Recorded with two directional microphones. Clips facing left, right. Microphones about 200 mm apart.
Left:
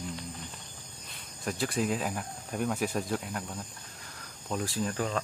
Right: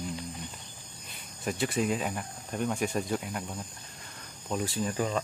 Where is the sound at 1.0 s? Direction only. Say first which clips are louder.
Right 2 dB; centre (ahead or behind).